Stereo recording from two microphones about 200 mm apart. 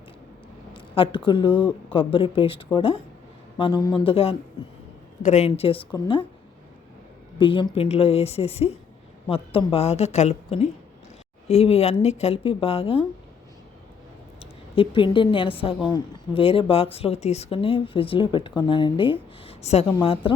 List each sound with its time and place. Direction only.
0.7 s speech: 25° left (ahead or behind)
7.3 s a woman's voice: 25° left (ahead or behind)
14.8 s speech: 25° left (ahead or behind)